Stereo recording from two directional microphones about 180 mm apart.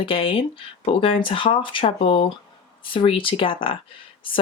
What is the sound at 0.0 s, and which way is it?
Speech, 30° left (ahead or behind).